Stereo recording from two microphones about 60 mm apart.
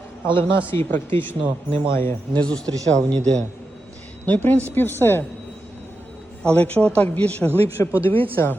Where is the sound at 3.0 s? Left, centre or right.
Centre.